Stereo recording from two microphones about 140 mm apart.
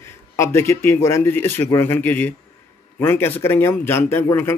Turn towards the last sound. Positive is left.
turn(degrees=15)  # may be behind; listen again after turning